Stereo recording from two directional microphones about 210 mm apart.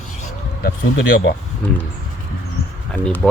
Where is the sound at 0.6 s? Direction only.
50° left (ahead or behind).